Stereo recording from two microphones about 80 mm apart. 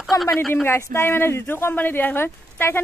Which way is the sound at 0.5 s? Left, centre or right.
Left.